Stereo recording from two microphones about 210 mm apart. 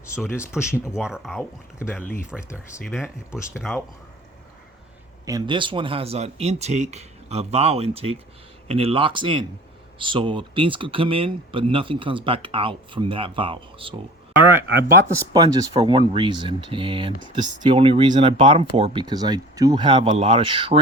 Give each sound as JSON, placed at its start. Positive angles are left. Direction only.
{"t": 0.4, "sound": "speech", "side_deg": -5}
{"t": 3.3, "sound": "speech", "side_deg": 0}
{"t": 5.2, "sound": "speech", "side_deg": -20}
{"t": 14.8, "sound": "speech", "side_deg": -50}
{"t": 15.3, "sound": "speech", "side_deg": -20}